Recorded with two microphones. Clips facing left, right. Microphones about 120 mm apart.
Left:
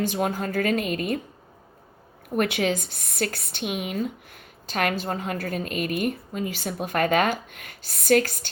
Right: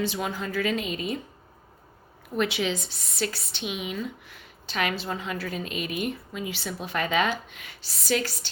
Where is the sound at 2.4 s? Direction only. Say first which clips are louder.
Left 3 dB; 50° left (ahead or behind).